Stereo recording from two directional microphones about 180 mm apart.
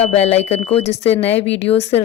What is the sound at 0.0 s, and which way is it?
Speech, 35° left (ahead or behind).